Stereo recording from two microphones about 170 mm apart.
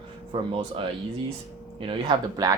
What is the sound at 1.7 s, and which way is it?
Speech, 30° right (ahead or behind).